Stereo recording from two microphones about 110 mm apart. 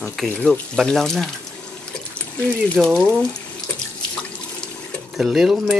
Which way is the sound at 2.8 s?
5° right (ahead or behind).